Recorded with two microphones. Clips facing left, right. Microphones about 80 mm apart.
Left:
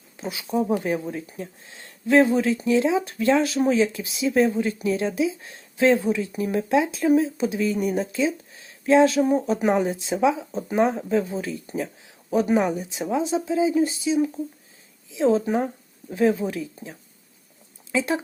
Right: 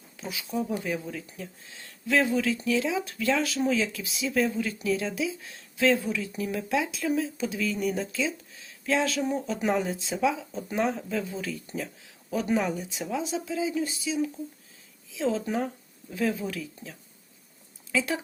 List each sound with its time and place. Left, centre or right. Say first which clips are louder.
0.2 s speech: left 6 dB; left
17.9 s speech: left 4 dB; left